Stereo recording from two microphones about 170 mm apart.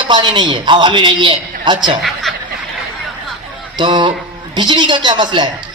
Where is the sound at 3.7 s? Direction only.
25° right (ahead or behind).